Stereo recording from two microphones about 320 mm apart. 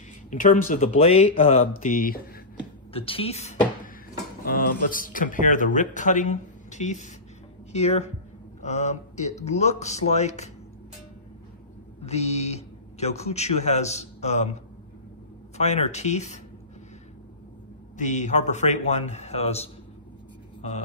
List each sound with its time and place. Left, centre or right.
0.3 s speech: left
12.0 s speech: centre
17.9 s speech: left